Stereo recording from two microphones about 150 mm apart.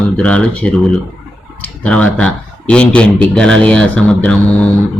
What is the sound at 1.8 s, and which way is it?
A man's voice, 10° left (ahead or behind).